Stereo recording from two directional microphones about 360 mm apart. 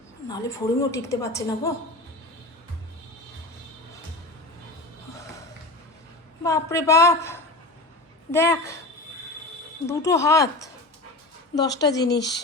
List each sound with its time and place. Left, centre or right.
0.3 s a woman's voice: centre
6.4 s a woman's voice: centre
9.8 s a woman's voice: centre
11.8 s a woman's voice: centre
12.0 s speech: left